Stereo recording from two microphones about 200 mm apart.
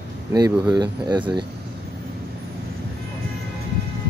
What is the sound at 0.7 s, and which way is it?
Speech, 20° right (ahead or behind).